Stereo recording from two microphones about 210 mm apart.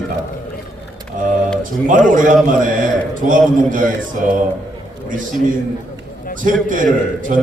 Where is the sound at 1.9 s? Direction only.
40° right (ahead or behind).